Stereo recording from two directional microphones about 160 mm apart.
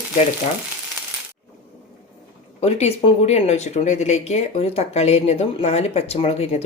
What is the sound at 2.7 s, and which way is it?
Speech, 40° left (ahead or behind).